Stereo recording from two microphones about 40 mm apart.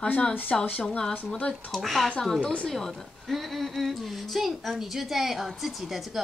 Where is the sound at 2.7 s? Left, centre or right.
Centre.